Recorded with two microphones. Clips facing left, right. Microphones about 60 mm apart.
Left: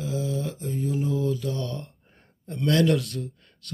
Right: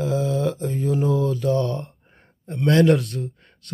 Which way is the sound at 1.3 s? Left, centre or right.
Right.